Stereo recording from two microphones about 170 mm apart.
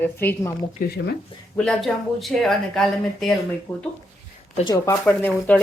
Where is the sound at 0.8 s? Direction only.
55° left (ahead or behind).